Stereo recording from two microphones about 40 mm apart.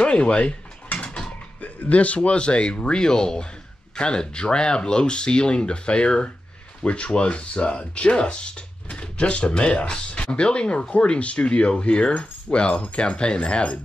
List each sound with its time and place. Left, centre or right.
0.0 s speech: left
0.9 s mechanisms: left
1.6 s speech: left